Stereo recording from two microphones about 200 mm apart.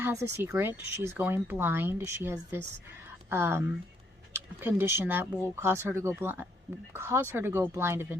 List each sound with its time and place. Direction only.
0.0 s speech: 10° right (ahead or behind)